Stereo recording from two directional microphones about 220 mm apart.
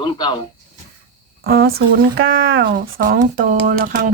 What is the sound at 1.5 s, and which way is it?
Speech, 45° right (ahead or behind).